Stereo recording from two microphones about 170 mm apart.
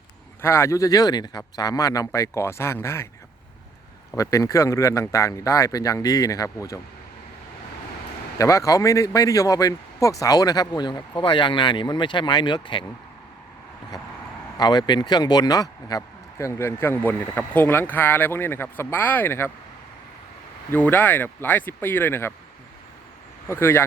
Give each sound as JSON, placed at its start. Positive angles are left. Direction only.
{"t": 0.4, "sound": "speech", "side_deg": 15}
{"t": 4.2, "sound": "speech", "side_deg": 20}
{"t": 8.4, "sound": "speech", "side_deg": 20}
{"t": 14.6, "sound": "speech", "side_deg": 25}
{"t": 20.7, "sound": "speech", "side_deg": 10}
{"t": 23.5, "sound": "speech", "side_deg": 15}